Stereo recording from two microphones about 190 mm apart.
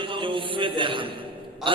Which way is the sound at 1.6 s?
Centre (ahead or behind).